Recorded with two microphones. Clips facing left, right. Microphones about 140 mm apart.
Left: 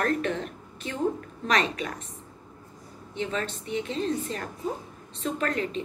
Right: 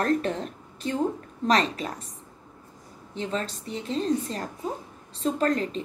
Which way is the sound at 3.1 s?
35° right (ahead or behind).